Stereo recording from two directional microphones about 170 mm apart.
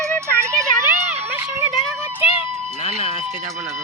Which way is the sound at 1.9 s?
15° right (ahead or behind).